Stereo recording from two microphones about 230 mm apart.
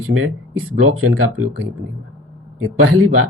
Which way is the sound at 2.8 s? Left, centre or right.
Right.